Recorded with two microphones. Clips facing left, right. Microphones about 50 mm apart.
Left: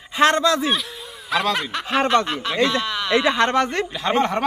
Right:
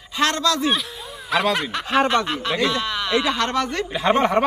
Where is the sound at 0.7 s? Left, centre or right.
Centre.